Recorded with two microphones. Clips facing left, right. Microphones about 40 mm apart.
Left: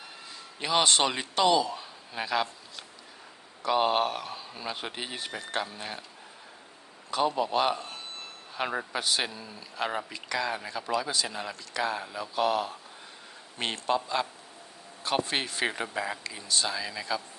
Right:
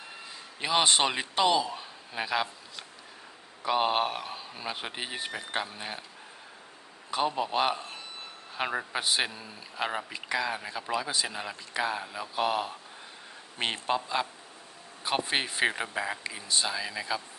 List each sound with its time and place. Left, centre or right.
0.6 s a man's voice: centre
7.1 s speech: centre
16.2 s speech: centre